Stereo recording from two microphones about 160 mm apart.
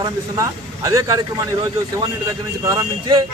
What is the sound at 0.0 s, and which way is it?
Speech, 20° right (ahead or behind).